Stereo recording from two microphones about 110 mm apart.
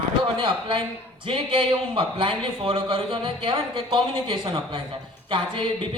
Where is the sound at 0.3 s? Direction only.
45° right (ahead or behind).